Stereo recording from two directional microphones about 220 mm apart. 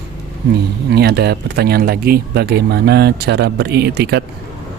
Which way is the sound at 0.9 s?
45° right (ahead or behind).